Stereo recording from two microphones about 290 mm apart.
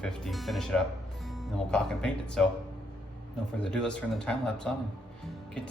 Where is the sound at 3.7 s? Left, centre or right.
Centre.